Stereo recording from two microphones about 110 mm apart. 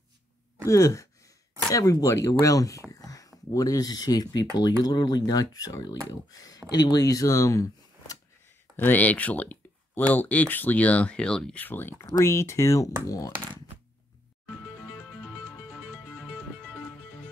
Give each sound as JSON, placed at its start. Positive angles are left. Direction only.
{"t": 0.7, "sound": "speech", "side_deg": 30}
{"t": 8.7, "sound": "speech", "side_deg": 15}
{"t": 11.6, "sound": "speech", "side_deg": 20}
{"t": 14.9, "sound": "music", "side_deg": -5}